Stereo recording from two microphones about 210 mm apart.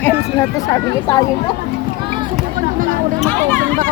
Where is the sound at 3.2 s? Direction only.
10° left (ahead or behind).